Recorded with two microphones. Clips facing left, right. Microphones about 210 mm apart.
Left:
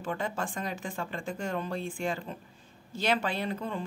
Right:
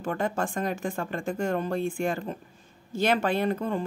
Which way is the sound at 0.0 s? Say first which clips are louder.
Right 5 dB; 50° right (ahead or behind).